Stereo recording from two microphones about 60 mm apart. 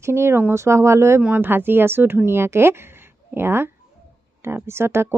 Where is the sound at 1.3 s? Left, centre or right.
Right.